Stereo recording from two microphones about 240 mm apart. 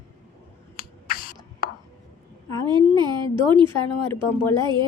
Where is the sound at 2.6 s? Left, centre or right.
Centre.